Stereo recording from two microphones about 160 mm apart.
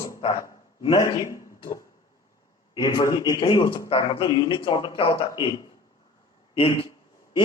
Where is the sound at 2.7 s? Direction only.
25° left (ahead or behind).